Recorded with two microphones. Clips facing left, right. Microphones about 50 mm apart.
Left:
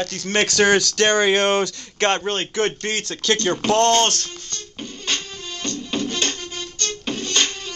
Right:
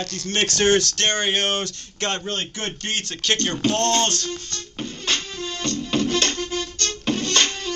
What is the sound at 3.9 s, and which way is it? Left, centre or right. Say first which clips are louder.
Music: left 4 dB; left.